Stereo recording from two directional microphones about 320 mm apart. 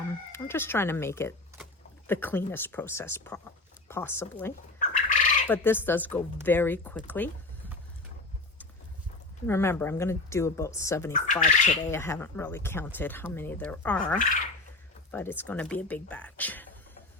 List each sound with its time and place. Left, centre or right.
0.3 s speech: centre
4.8 s fowl: left
5.5 s a woman's voice: centre
9.5 s speech: centre
11.1 s speech: left
11.9 s speech: centre
15.1 s a woman's voice: centre